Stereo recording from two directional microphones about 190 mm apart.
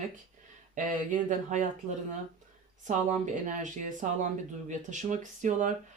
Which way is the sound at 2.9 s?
40° right (ahead or behind).